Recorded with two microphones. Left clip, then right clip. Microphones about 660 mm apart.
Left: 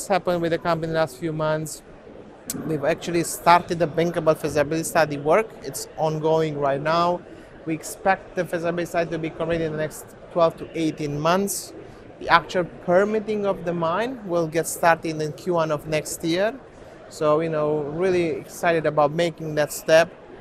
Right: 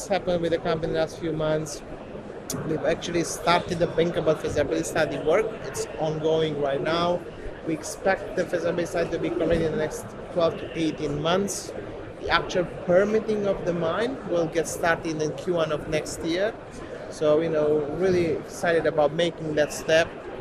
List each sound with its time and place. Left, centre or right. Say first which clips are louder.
0.1 s speech: left 3 dB; left